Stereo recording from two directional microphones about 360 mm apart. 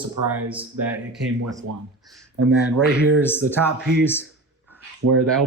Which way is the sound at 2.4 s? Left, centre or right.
Right.